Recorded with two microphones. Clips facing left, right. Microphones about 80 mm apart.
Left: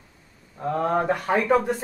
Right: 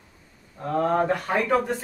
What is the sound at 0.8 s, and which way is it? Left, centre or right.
Speech, centre.